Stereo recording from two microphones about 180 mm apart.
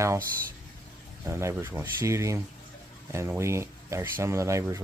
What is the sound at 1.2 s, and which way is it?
Speech, 15° right (ahead or behind).